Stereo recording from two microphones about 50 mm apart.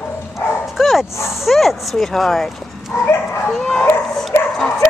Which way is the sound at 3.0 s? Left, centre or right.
Left.